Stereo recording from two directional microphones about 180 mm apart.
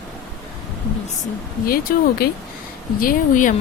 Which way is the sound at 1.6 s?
55° left (ahead or behind).